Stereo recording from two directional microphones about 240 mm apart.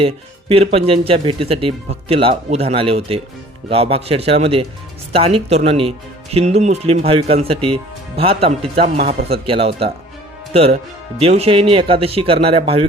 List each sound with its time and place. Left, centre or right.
0.0 s speech: right
11.2 s speech: right